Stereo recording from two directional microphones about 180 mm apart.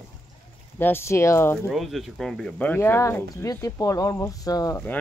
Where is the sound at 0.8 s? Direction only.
15° left (ahead or behind).